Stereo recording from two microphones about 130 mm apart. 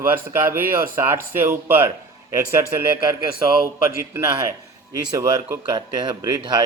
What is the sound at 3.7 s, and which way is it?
A man's voice, 20° right (ahead or behind).